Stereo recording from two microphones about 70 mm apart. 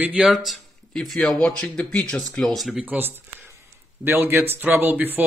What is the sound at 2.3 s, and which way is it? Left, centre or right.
Speech, centre.